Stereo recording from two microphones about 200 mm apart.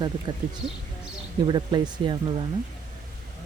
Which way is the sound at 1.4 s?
20° right (ahead or behind).